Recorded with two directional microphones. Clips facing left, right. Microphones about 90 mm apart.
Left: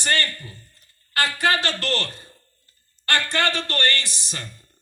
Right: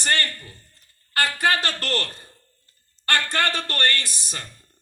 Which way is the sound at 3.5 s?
40° right (ahead or behind).